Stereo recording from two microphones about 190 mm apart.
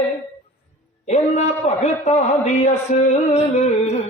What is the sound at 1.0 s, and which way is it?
Music, 35° left (ahead or behind).